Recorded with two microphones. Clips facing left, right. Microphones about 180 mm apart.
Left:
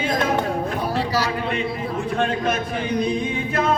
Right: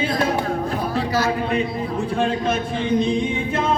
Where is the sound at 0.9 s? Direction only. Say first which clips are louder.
Right 2 dB; 35° left (ahead or behind).